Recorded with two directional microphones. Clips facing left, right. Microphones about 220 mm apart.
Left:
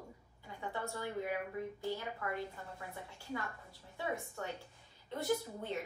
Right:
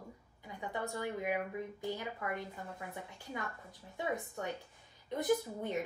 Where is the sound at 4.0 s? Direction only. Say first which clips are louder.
Right 2 dB; 20° right (ahead or behind).